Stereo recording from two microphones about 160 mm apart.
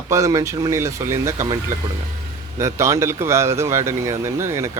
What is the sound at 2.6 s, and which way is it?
Speech, 20° right (ahead or behind).